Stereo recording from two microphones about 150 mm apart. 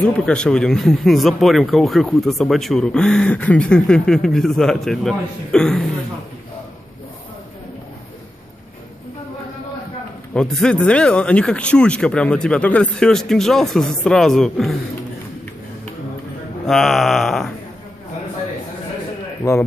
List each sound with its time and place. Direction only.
0.0 s speech: 5° left (ahead or behind)
10.3 s speech: 5° left (ahead or behind)
16.6 s speech: centre (ahead or behind)
19.4 s speech: 25° left (ahead or behind)